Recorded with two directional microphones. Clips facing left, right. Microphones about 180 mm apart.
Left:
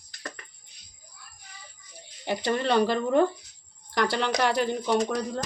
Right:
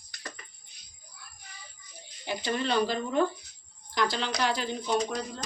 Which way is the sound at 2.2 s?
60° left (ahead or behind).